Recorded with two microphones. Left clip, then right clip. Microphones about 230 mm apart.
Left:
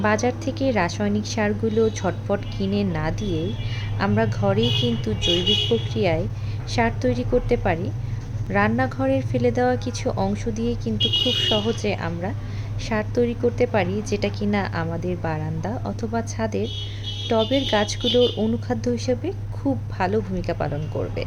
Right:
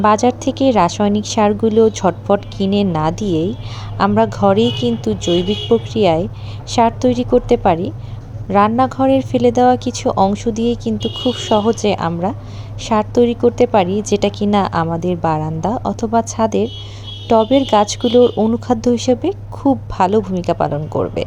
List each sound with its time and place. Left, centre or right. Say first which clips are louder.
0.0 s a woman's voice: right 9 dB; right